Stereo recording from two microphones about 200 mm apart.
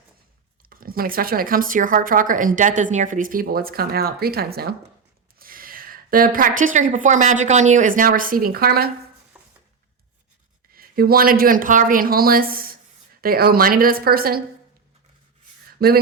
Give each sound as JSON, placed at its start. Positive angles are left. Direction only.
{"t": 0.6, "sound": "a woman's voice", "side_deg": -45}
{"t": 9.3, "sound": "a sound", "side_deg": -5}
{"t": 10.8, "sound": "a woman's voice", "side_deg": -50}
{"t": 15.8, "sound": "a woman's voice", "side_deg": -50}